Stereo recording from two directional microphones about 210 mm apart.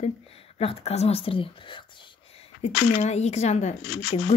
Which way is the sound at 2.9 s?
30° left (ahead or behind).